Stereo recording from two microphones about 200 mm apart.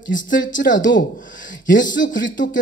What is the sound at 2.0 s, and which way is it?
Speech, 40° left (ahead or behind).